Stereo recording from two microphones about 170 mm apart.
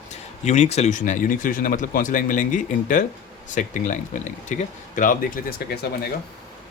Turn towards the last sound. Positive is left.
turn(degrees=60)  # may be behind; listen again after turning